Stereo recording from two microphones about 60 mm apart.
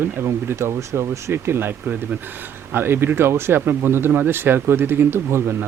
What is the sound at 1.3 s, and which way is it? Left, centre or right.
Speech, right.